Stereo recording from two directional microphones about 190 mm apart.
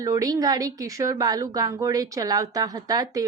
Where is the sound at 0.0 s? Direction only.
20° right (ahead or behind).